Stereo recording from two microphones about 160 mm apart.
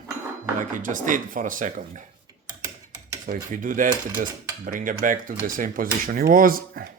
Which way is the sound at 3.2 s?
55° right (ahead or behind).